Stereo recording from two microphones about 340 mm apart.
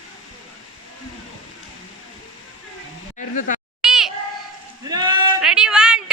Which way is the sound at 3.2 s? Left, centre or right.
Left.